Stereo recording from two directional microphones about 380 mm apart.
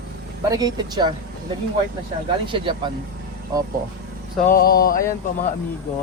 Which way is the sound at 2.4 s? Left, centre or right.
Centre.